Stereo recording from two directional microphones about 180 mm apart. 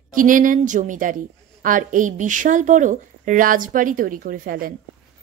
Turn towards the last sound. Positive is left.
turn(degrees=-55)  # may be behind; listen again after turning